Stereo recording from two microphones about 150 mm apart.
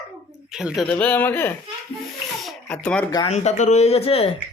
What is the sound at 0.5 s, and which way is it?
Speech, 5° right (ahead or behind).